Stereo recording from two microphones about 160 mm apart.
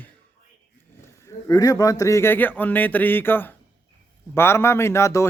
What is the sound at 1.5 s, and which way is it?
Speech, 20° left (ahead or behind).